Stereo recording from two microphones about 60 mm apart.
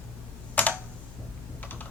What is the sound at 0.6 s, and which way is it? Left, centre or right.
Computer keyboard, left.